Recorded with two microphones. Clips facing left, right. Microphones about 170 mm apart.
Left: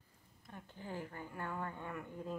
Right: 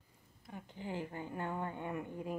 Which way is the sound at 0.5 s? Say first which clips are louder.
Right 4 dB; 15° right (ahead or behind).